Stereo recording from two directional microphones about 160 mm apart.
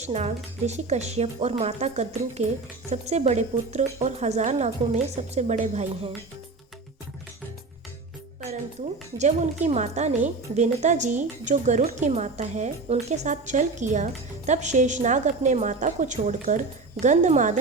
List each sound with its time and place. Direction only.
0.0 s a woman's voice: 45° right (ahead or behind)
9.1 s a woman's voice: 45° right (ahead or behind)